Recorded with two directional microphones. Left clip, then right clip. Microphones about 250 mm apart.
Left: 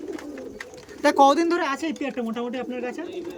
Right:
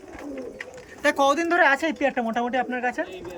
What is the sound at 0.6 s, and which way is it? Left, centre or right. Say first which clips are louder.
Speech: left 2 dB; centre.